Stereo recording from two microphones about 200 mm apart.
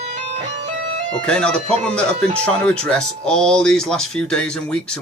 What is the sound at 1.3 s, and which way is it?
Speech, 5° left (ahead or behind).